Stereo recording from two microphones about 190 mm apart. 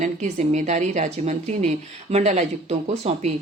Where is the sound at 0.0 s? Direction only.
40° right (ahead or behind).